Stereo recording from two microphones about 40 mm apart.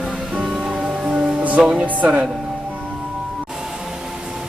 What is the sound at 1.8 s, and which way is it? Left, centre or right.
Speech, right.